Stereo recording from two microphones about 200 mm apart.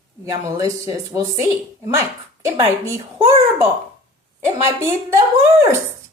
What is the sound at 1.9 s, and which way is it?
A child's voice, 15° right (ahead or behind).